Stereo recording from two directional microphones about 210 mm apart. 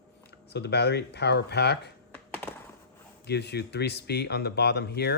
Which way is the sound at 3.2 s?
50° left (ahead or behind).